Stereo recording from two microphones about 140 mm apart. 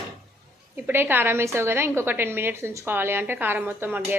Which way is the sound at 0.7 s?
15° right (ahead or behind).